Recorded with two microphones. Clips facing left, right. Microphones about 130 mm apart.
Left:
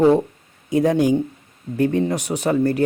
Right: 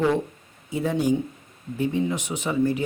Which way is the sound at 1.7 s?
65° left (ahead or behind).